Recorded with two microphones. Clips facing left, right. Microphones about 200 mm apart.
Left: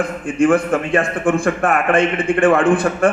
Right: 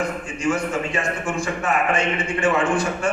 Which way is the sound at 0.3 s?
55° left (ahead or behind).